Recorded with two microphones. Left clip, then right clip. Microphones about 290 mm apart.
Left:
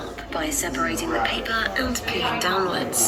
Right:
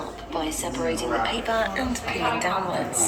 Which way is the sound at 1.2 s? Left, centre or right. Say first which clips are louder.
Even; centre.